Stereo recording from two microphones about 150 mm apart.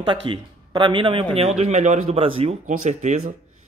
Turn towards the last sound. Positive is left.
turn(degrees=-50)  # may be behind; listen again after turning